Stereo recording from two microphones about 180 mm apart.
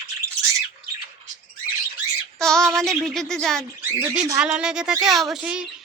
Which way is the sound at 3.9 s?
15° right (ahead or behind).